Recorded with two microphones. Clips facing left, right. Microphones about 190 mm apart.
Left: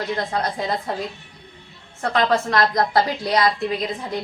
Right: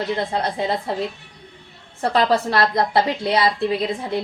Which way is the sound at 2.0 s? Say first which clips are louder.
Right 2 dB; 30° right (ahead or behind).